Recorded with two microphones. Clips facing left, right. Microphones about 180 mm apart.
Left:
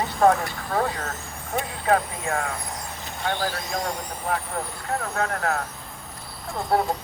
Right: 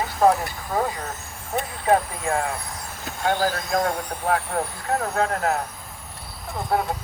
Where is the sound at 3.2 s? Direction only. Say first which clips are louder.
Right 5 dB; 45° right (ahead or behind).